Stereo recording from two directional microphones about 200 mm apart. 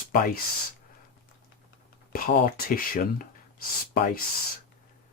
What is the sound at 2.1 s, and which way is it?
Speech, 45° left (ahead or behind).